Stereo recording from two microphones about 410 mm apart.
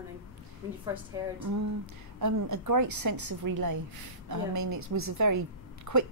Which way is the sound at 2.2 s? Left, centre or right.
Right.